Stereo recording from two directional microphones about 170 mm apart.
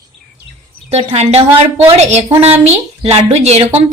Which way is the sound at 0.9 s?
40° right (ahead or behind).